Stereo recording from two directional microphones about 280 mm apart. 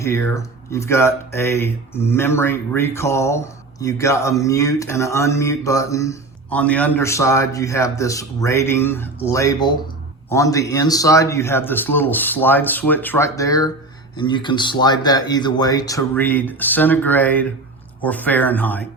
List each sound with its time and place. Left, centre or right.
0.0 s speech: centre